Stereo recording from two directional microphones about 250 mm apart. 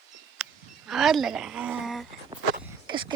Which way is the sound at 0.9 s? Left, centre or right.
Centre.